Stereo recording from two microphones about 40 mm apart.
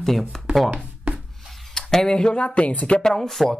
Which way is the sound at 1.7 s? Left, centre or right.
Centre.